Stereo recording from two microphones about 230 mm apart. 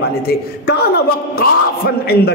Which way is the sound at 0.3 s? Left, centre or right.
Left.